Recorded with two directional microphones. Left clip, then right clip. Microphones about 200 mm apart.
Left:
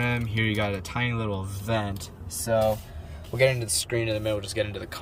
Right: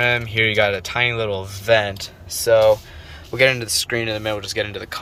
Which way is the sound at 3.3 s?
5° left (ahead or behind).